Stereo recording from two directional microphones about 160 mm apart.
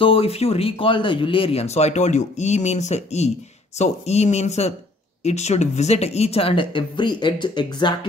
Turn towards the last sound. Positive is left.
turn(degrees=25)  # may be behind; listen again after turning